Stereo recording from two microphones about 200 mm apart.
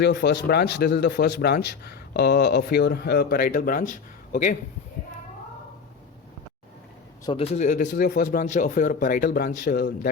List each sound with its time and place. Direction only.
0.0 s speech: 55° left (ahead or behind); by 4.5 s 40° left (ahead or behind)
7.3 s speech: 30° left (ahead or behind); by 10.1 s 45° left (ahead or behind)